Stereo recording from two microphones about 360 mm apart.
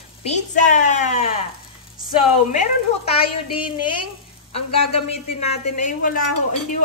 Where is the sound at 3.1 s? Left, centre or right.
Centre.